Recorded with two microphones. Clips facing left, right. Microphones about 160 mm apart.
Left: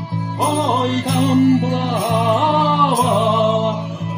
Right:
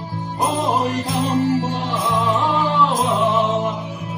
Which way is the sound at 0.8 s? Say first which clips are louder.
Left 4 dB; 65° left (ahead or behind).